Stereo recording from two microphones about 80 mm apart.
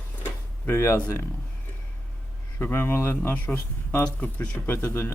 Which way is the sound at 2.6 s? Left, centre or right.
Left.